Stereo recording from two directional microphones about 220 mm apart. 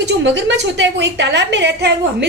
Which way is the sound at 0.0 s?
55° right (ahead or behind).